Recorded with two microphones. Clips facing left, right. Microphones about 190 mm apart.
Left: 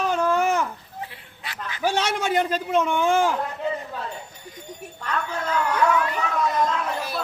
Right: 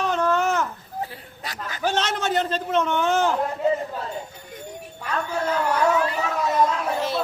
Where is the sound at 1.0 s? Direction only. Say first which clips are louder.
Right 5 dB; 40° right (ahead or behind).